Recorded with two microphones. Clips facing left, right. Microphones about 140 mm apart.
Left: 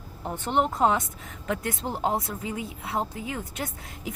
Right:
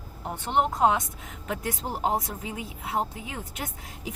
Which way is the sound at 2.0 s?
25° right (ahead or behind).